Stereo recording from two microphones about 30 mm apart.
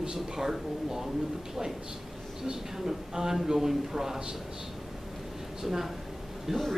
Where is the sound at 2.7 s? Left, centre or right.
Centre.